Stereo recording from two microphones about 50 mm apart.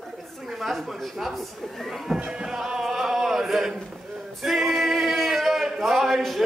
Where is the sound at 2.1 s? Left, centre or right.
Right.